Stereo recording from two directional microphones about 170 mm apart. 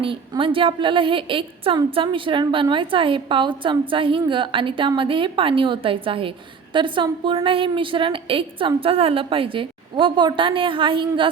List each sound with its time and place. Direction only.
0.0 s a woman's voice: 30° right (ahead or behind)